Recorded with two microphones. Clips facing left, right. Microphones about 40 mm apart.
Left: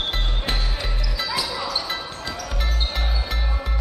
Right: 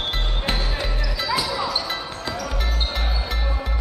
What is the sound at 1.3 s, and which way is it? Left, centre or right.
Basketball bounce, centre.